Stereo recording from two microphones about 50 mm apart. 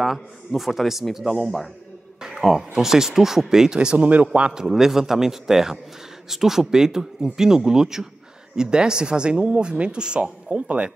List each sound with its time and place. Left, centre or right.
0.0 s speech: centre
4.6 s speech: centre